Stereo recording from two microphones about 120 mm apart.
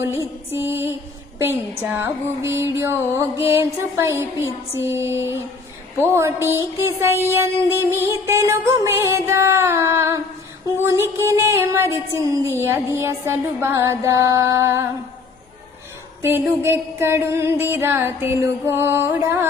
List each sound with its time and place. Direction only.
0.0 s music: 20° right (ahead or behind)
16.2 s music: 20° right (ahead or behind)